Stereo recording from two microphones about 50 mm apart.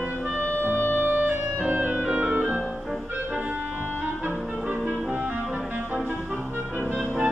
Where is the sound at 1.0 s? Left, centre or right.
Right.